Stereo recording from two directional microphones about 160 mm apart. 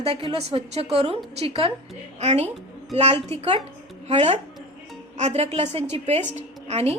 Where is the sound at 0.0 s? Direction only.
35° right (ahead or behind).